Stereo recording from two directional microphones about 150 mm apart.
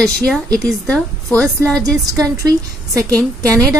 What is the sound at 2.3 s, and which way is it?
Speech, 20° right (ahead or behind).